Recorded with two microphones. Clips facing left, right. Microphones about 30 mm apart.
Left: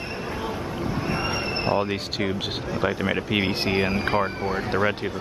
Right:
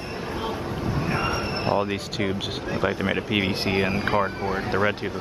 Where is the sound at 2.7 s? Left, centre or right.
Centre.